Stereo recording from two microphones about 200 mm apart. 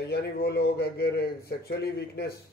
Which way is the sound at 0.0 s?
55° left (ahead or behind).